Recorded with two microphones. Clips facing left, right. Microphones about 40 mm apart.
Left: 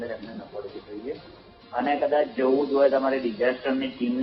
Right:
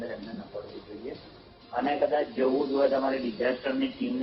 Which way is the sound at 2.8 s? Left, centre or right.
Centre.